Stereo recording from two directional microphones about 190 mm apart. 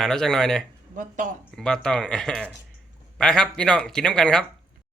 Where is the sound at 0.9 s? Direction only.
45° right (ahead or behind).